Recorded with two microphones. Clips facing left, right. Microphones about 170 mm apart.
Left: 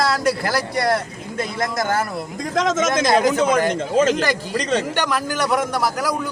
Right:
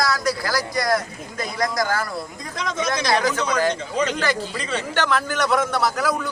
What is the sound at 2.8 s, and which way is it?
Speech, 45° left (ahead or behind).